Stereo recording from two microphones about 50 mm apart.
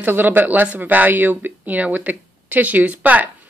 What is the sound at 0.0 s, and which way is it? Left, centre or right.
Speech, right.